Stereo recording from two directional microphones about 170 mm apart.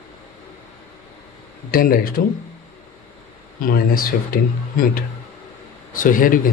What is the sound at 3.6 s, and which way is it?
Speech, 60° left (ahead or behind).